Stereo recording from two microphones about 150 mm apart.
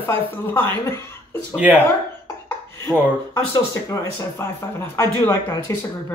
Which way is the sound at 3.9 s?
15° left (ahead or behind).